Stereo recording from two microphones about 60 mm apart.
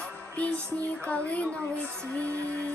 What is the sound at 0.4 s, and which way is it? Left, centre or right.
Music, left.